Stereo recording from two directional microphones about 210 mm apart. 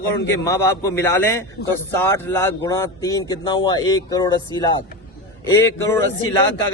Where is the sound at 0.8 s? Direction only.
15° left (ahead or behind).